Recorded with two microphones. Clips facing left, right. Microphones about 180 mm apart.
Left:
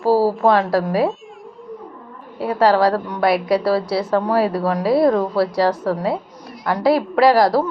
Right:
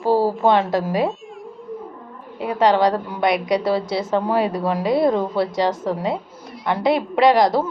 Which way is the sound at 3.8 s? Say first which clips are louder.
Left 2 dB; centre (ahead or behind).